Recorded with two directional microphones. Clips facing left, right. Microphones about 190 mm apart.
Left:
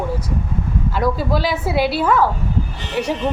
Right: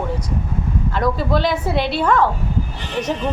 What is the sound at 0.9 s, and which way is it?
A woman's voice, 5° left (ahead or behind).